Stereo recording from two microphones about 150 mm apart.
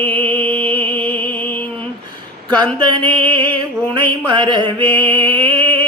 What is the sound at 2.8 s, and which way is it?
Music, 30° right (ahead or behind).